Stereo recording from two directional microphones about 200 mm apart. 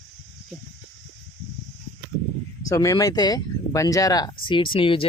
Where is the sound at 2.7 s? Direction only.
15° left (ahead or behind).